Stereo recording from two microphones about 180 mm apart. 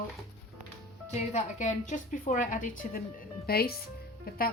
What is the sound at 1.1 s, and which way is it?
A woman's voice, 40° left (ahead or behind).